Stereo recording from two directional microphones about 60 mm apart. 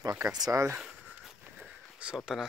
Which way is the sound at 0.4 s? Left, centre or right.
Right.